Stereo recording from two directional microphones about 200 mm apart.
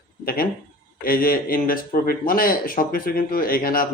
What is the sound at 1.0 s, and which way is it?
Speech, 45° left (ahead or behind).